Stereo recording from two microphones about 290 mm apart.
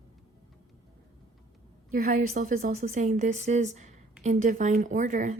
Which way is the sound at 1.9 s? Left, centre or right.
Right.